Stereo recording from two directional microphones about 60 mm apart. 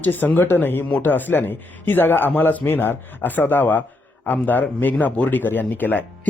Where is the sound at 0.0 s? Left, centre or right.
Left.